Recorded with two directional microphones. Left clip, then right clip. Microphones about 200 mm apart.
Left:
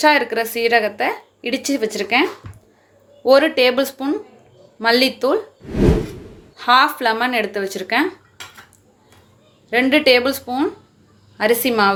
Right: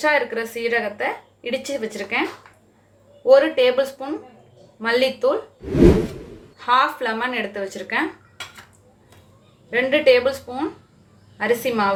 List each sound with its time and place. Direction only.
0.0 s a woman's voice: 50° left (ahead or behind)
3.2 s a woman's voice: 50° left (ahead or behind)
5.6 s whoosh: centre (ahead or behind)
6.6 s a woman's voice: 50° left (ahead or behind)
9.6 s a woman's voice: 50° left (ahead or behind)